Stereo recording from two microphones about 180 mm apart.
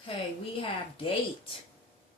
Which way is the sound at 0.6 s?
30° left (ahead or behind).